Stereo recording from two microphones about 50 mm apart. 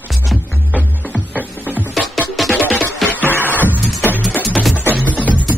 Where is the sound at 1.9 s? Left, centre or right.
Centre.